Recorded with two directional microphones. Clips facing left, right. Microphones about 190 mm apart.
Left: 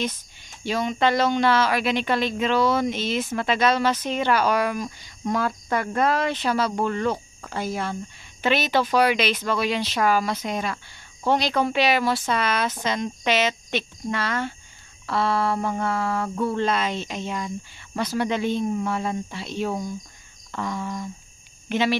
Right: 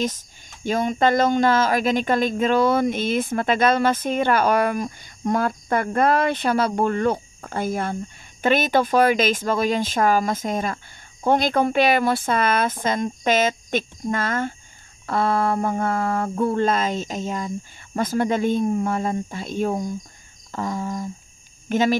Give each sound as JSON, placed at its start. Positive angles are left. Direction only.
{"t": 0.7, "sound": "speech", "side_deg": -45}